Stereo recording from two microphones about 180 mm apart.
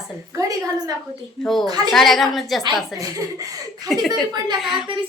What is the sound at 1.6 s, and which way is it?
Speech, 20° right (ahead or behind).